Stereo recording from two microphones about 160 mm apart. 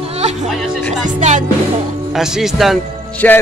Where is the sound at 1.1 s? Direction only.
50° right (ahead or behind).